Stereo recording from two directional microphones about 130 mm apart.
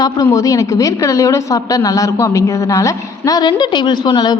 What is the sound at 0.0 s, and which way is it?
A woman's voice, 25° left (ahead or behind).